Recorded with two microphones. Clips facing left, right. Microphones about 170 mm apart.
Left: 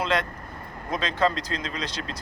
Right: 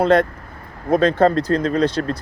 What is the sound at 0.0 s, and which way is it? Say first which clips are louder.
Speech: right 11 dB; 55° right (ahead or behind).